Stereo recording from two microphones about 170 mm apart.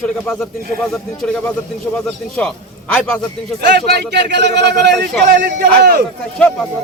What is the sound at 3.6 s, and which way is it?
A man's voice, 75° right (ahead or behind).